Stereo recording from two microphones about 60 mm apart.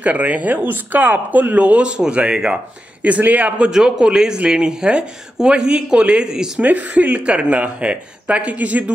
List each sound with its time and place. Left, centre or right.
0.0 s speech: right
3.0 s speech: right
3.6 s speech: centre
6.6 s speech: right